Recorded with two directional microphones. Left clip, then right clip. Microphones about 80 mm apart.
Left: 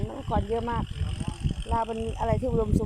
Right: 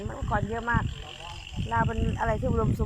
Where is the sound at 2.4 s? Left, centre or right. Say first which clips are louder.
Left 1 dB; centre.